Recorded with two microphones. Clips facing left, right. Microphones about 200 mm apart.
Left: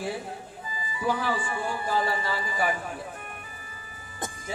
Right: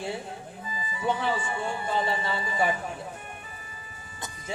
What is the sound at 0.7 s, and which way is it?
Speech, 25° right (ahead or behind).